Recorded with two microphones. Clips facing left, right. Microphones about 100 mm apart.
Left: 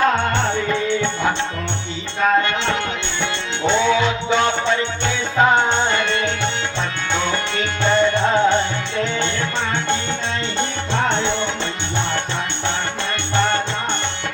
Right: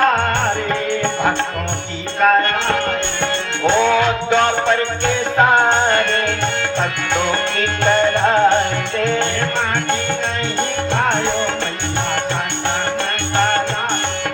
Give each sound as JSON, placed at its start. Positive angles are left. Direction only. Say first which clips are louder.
{"t": 0.3, "sound": "music", "louder": "right 1 dB", "side_deg": -50}
{"t": 10.6, "sound": "music", "louder": "right 3 dB", "side_deg": -50}
{"t": 13.3, "sound": "music", "louder": "right 2 dB", "side_deg": -50}